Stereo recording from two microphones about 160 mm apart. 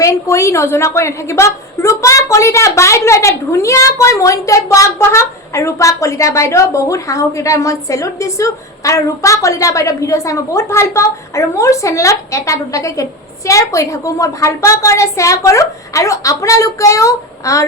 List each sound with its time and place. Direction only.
0.0 s a woman's voice: 20° left (ahead or behind)